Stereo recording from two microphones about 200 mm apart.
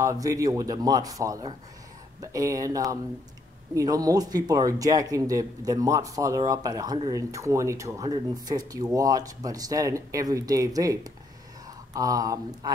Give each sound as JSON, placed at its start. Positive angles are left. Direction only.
{"t": 0.0, "sound": "speech", "side_deg": -15}